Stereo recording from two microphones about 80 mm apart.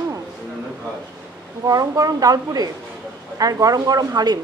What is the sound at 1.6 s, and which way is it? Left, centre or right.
Speech, right.